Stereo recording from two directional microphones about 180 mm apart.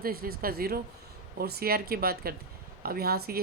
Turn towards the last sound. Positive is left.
turn(degrees=-60)  # may be behind; listen again after turning